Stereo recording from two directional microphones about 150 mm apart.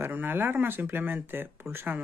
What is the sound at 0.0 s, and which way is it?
Speech, 15° right (ahead or behind).